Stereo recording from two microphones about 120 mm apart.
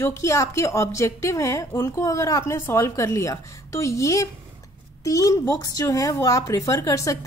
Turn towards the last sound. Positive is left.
turn(degrees=25)  # may be behind; listen again after turning